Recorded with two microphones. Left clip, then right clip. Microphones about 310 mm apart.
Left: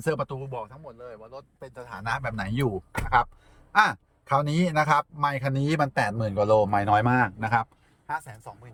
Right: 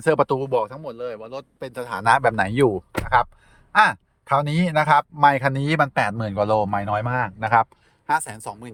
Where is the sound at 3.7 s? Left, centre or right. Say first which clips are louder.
Right 5 dB; centre.